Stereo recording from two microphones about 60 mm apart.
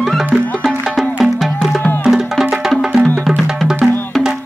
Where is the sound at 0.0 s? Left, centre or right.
Centre.